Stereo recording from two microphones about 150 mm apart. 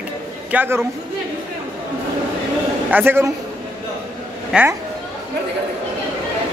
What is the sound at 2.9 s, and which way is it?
Speech, 15° right (ahead or behind).